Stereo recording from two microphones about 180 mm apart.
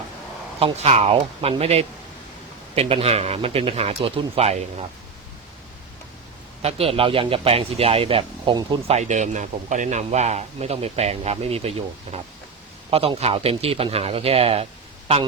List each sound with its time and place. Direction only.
0.6 s a man's voice: 35° right (ahead or behind)
6.6 s a man's voice: 35° right (ahead or behind)
9.0 s a man's voice: 40° right (ahead or behind)